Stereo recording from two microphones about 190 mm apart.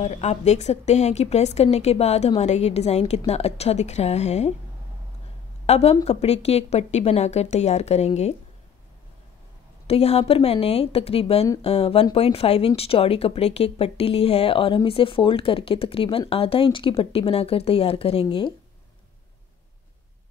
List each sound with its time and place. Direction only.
0.0 s speech: 35° left (ahead or behind)
5.7 s speech: 35° left (ahead or behind)
9.8 s speech: 30° left (ahead or behind)